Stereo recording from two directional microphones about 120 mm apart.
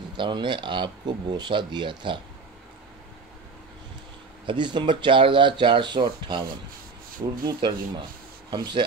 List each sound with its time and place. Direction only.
0.2 s speech: 40° right (ahead or behind)
4.5 s speech: 40° right (ahead or behind)
7.4 s speech: 35° right (ahead or behind)